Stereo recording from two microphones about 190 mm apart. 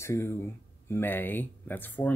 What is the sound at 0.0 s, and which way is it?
Speech, 15° left (ahead or behind).